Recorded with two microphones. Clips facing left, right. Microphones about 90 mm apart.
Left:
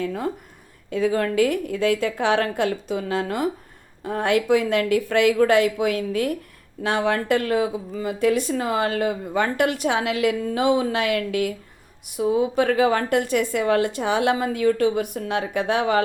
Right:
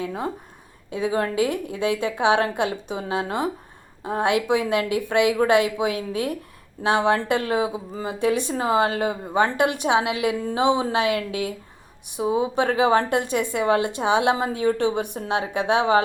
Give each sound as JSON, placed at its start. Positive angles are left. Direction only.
{"t": 0.0, "sound": "speech", "side_deg": -25}